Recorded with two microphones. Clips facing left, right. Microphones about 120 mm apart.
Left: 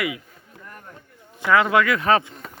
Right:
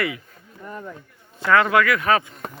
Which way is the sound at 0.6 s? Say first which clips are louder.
Right 9 dB; 90° right.